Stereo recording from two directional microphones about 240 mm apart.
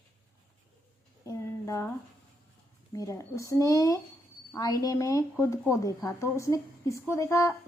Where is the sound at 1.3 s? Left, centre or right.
Centre.